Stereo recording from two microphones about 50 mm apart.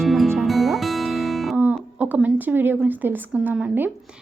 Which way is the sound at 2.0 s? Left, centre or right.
Right.